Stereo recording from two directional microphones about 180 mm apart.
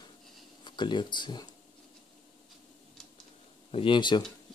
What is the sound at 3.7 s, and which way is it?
Speech, 30° left (ahead or behind).